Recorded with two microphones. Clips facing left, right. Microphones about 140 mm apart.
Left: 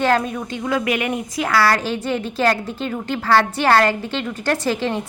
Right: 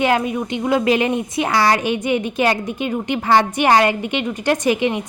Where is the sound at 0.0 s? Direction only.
15° right (ahead or behind).